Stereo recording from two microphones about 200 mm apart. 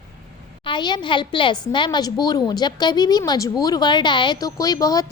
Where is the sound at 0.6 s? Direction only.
25° left (ahead or behind).